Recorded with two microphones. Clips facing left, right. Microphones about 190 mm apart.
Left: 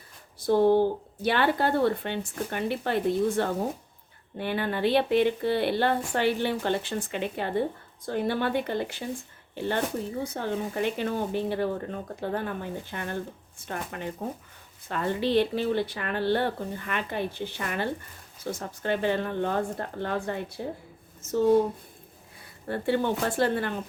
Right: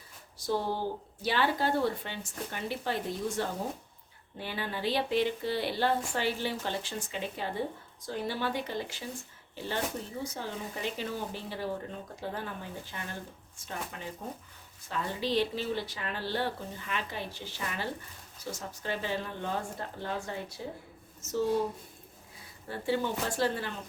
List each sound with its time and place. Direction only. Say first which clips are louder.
0.3 s a sound: left 10 dB; 55° left (ahead or behind)
1.2 s speech: left 5 dB; 60° left (ahead or behind)
22.6 s speech: left 5 dB; 60° left (ahead or behind)